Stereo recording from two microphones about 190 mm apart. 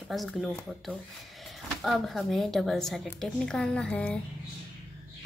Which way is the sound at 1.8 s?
Centre (ahead or behind).